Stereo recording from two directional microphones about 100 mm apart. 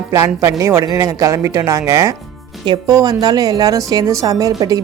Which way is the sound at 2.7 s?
40° right (ahead or behind).